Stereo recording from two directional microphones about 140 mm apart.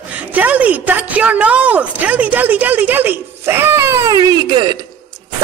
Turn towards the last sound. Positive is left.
turn(degrees=-30)  # may be behind; listen again after turning